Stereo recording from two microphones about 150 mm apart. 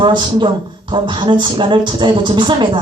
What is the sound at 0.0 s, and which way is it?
Speech, 30° right (ahead or behind).